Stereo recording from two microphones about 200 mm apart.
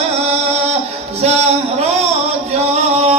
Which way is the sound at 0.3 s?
30° right (ahead or behind).